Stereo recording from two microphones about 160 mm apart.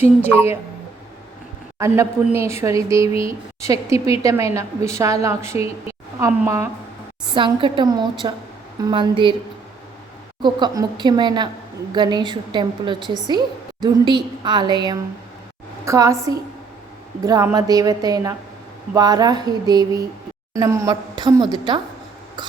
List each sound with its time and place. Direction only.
0.3 s a woman's voice: 15° right (ahead or behind)
1.8 s a woman's voice: 15° right (ahead or behind)
3.1 s a woman's voice: 35° left (ahead or behind)
3.6 s a woman's voice: 20° right (ahead or behind)
7.3 s a woman's voice: 30° right (ahead or behind)
10.4 s a woman's voice: 30° right (ahead or behind)